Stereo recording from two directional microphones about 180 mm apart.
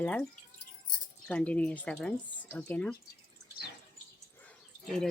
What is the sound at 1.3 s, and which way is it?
Speech, 5° left (ahead or behind).